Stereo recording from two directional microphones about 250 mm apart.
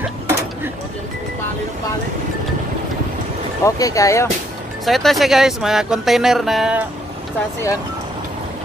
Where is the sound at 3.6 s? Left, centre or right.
Centre.